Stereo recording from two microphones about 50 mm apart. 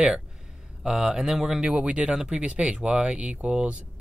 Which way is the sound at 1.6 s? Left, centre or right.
Right.